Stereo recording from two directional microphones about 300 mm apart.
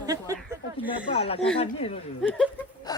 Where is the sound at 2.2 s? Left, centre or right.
Centre.